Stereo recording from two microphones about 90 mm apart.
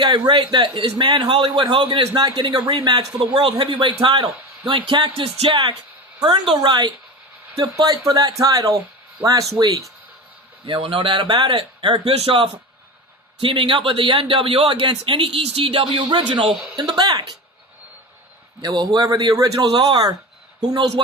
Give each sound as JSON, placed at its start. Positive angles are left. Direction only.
{"t": 0.3, "sound": "a man's voice", "side_deg": -60}
{"t": 2.1, "sound": "speech", "side_deg": -45}
{"t": 3.3, "sound": "a man's voice", "side_deg": -90}
{"t": 6.6, "sound": "speech", "side_deg": -55}
{"t": 7.8, "sound": "speech", "side_deg": -40}
{"t": 10.7, "sound": "speech", "side_deg": -80}
{"t": 12.0, "sound": "a man's voice", "side_deg": -90}
{"t": 13.4, "sound": "speech", "side_deg": -75}
{"t": 18.6, "sound": "speech", "side_deg": -45}